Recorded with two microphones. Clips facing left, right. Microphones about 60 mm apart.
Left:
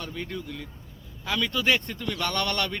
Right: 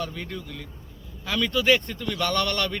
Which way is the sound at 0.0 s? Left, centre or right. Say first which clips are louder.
Right 2 dB; centre.